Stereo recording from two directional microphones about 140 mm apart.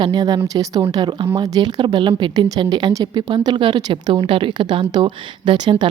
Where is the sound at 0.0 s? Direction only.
30° right (ahead or behind).